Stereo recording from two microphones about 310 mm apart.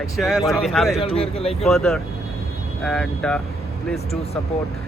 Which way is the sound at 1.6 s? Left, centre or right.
Centre.